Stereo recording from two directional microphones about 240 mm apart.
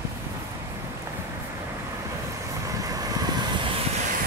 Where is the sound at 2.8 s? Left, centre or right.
Centre.